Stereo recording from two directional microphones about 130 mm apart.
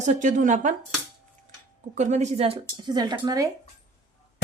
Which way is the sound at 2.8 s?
30° right (ahead or behind).